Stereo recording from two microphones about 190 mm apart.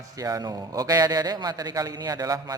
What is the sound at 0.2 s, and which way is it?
A man's voice, 20° right (ahead or behind).